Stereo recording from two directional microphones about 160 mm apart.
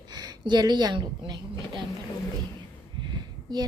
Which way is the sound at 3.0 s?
25° right (ahead or behind).